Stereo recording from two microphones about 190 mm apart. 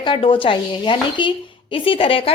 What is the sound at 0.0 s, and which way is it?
Speech, 25° left (ahead or behind).